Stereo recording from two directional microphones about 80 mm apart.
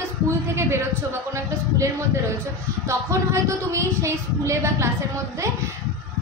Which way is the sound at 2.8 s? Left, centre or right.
Right.